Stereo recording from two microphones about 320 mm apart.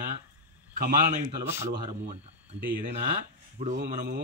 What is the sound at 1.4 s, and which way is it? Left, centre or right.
Speech, centre.